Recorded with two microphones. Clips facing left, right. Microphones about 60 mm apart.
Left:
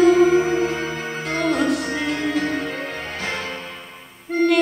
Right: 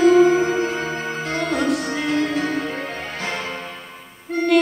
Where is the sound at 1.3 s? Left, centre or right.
Centre.